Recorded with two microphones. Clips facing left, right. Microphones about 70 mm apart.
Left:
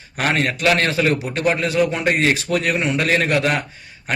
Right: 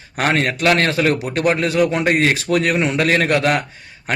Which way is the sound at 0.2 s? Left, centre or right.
Right.